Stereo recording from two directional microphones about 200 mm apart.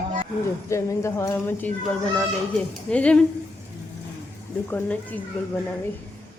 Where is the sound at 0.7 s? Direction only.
15° left (ahead or behind).